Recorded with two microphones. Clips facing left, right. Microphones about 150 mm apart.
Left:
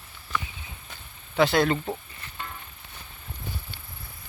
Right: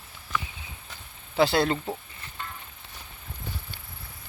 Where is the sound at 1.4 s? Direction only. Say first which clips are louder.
Left 1 dB; 30° right (ahead or behind).